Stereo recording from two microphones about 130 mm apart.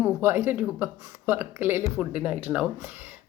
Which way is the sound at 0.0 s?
15° right (ahead or behind).